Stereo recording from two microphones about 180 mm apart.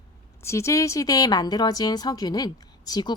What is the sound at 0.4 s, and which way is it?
A woman's voice, 15° left (ahead or behind).